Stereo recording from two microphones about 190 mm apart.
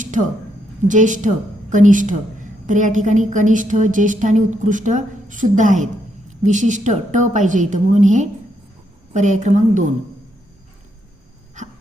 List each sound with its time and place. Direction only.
0.9 s a woman's voice: 40° right (ahead or behind)